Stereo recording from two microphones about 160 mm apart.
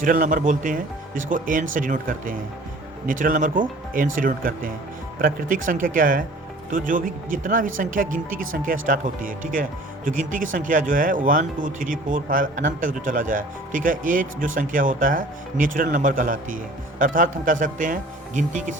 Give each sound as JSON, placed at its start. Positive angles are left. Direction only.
{"t": 0.0, "sound": "speech", "side_deg": -60}